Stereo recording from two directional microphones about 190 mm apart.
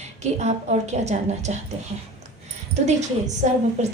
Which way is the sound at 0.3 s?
35° right (ahead or behind).